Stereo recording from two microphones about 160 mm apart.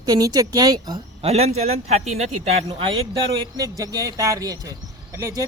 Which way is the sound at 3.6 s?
20° right (ahead or behind).